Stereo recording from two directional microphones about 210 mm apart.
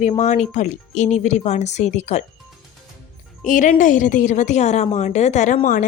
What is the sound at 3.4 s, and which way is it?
Speech, 40° left (ahead or behind).